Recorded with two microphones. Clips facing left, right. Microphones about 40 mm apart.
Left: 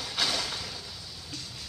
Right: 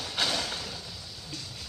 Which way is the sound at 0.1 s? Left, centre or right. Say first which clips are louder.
Even; right.